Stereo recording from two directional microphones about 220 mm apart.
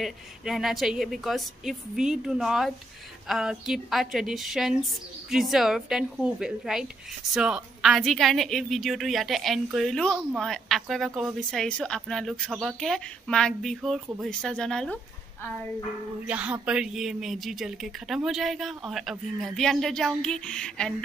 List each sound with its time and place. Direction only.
0.0 s a woman's voice: centre (ahead or behind)
16.3 s a woman's voice: 5° right (ahead or behind)